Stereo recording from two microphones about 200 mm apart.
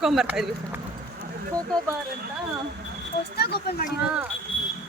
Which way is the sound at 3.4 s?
50° left (ahead or behind).